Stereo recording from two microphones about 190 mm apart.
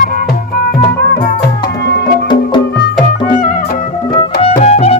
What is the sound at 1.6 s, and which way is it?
Music, 55° left (ahead or behind).